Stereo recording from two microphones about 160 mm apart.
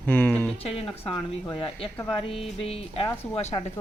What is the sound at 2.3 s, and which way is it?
Speech, 35° left (ahead or behind).